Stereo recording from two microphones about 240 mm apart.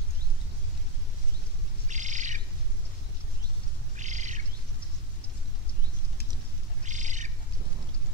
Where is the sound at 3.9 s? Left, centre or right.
Right.